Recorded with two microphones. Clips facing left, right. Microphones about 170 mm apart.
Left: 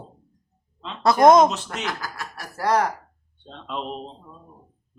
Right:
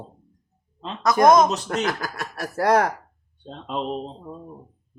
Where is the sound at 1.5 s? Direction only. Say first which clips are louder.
Right 5 dB; 40° right (ahead or behind).